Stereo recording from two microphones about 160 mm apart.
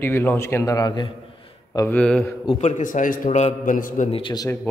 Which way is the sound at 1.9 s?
5° left (ahead or behind).